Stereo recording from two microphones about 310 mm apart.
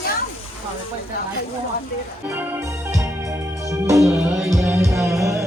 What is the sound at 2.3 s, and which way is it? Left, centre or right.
Music, centre.